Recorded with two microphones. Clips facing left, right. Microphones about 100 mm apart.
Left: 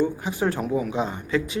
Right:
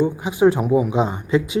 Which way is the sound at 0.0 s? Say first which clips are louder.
Right 7 dB; 15° right (ahead or behind).